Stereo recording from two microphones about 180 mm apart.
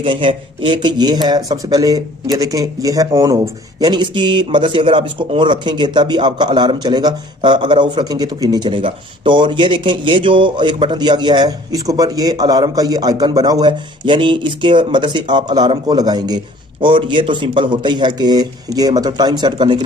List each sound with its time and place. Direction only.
0.0 s speech: 30° right (ahead or behind)